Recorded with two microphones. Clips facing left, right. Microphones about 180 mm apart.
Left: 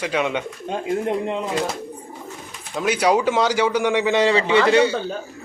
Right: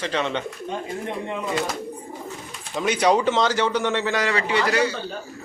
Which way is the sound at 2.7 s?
5° left (ahead or behind).